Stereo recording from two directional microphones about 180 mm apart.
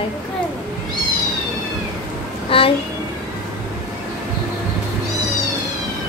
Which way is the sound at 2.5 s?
30° left (ahead or behind).